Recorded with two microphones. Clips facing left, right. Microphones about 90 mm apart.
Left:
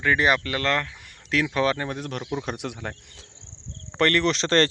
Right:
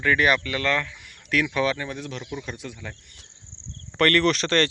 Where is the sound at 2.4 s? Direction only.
70° left (ahead or behind).